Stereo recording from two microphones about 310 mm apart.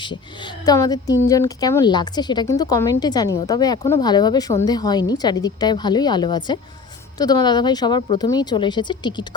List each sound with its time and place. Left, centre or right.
0.0 s speech: centre